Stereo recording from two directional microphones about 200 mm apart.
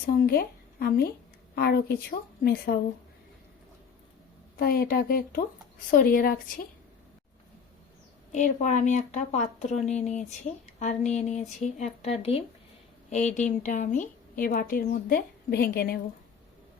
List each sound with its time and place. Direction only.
0.1 s a woman's voice: 45° left (ahead or behind)
4.5 s a woman's voice: 50° left (ahead or behind)
8.3 s a woman's voice: 40° left (ahead or behind)